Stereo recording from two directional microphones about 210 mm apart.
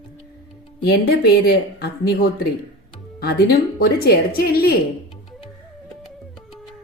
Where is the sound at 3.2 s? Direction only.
50° left (ahead or behind).